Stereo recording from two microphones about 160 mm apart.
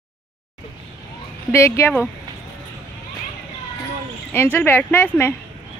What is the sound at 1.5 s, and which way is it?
Speech, 15° left (ahead or behind).